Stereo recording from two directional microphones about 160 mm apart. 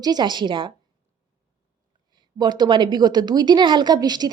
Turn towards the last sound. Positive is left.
turn(degrees=-25)  # may be behind; listen again after turning